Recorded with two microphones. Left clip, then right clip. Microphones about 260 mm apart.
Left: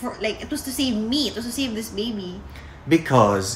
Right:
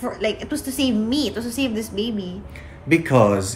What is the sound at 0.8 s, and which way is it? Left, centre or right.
Speech, centre.